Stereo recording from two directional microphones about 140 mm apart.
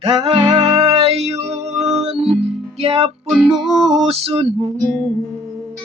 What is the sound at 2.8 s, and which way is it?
Music, 45° right (ahead or behind).